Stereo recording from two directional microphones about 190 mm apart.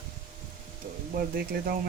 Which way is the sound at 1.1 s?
55° right (ahead or behind).